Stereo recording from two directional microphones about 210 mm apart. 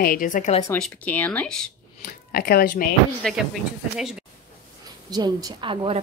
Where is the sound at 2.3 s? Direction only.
45° left (ahead or behind).